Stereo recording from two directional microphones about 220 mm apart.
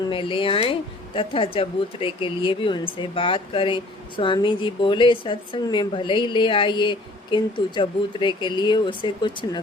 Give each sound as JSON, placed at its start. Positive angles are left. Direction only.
{"t": 0.1, "sound": "a woman's voice", "side_deg": 25}